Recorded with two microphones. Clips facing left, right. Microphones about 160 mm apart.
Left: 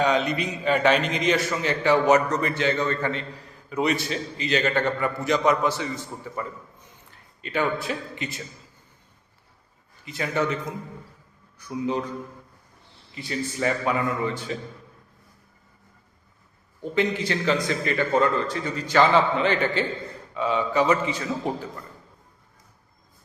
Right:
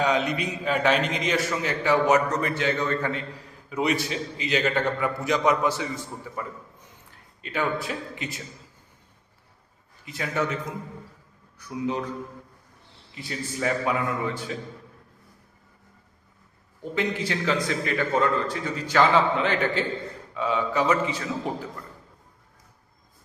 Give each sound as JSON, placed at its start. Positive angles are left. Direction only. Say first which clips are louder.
{"t": 0.0, "sound": "a man's voice", "louder": "left 1 dB", "side_deg": -5}
{"t": 10.1, "sound": "a man's voice", "louder": "left 2 dB", "side_deg": 0}
{"t": 13.1, "sound": "a man's voice", "louder": "left 3 dB", "side_deg": 0}
{"t": 16.8, "sound": "a man's voice", "louder": "left 3 dB", "side_deg": 0}